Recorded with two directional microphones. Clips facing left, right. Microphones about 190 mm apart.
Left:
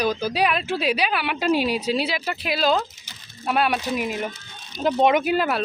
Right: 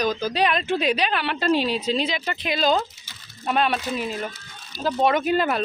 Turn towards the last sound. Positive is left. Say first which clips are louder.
# left 1 dB
turn(degrees=5)  # may be behind; listen again after turning